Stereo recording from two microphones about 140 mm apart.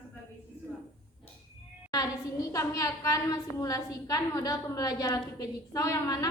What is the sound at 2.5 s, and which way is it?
A woman's voice, 25° left (ahead or behind).